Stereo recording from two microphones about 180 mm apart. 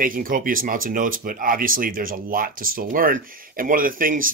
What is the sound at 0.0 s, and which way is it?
Speech, 50° right (ahead or behind).